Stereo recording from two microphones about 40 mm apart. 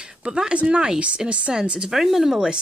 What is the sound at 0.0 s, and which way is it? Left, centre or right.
Speech, right.